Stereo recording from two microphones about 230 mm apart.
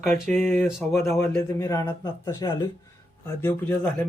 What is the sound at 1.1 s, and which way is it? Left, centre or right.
A man's voice, centre.